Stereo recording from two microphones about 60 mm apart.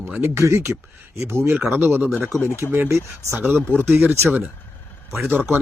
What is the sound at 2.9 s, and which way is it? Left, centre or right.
Speech, right.